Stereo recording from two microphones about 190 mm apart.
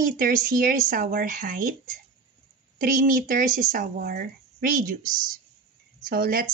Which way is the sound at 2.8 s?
50° right (ahead or behind).